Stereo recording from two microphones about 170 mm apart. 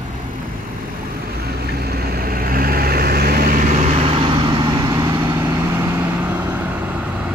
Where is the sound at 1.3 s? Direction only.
65° right (ahead or behind).